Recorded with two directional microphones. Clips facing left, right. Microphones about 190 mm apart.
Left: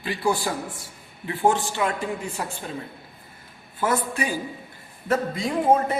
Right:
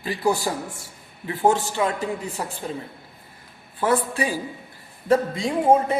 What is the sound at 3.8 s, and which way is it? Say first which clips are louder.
A man's voice: right 3 dB; 30° right (ahead or behind).